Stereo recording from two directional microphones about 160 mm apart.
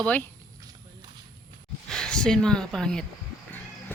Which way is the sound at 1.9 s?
5° left (ahead or behind).